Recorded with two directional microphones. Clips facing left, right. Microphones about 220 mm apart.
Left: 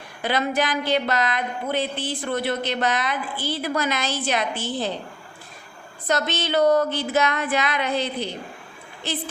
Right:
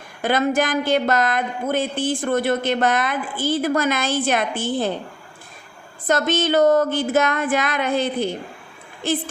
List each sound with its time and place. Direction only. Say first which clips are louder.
0.2 s speech: right 4 dB; 50° right (ahead or behind)
6.1 s speech: right 5 dB; 50° right (ahead or behind)